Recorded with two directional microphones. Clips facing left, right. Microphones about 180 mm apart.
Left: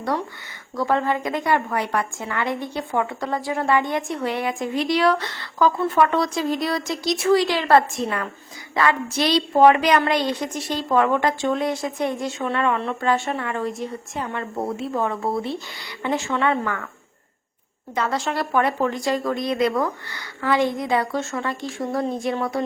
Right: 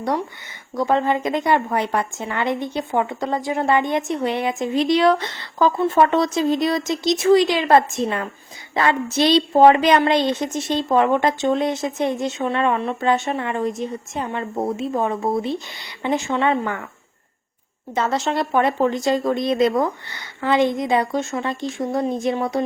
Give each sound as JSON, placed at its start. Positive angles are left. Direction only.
{"t": 0.0, "sound": "a woman's voice", "side_deg": -20}
{"t": 17.9, "sound": "a woman's voice", "side_deg": -25}